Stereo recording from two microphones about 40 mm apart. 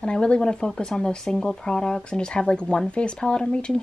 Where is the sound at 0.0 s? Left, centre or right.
Left.